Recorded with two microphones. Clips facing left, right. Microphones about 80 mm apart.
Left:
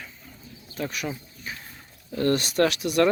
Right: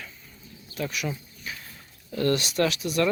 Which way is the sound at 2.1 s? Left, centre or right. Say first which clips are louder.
Left 1 dB; left.